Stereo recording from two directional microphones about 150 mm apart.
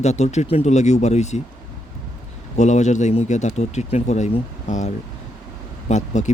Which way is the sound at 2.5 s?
50° left (ahead or behind).